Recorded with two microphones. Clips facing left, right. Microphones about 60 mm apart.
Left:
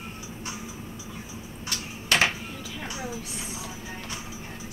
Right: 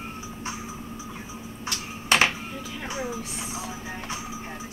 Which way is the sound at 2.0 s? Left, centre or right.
Right.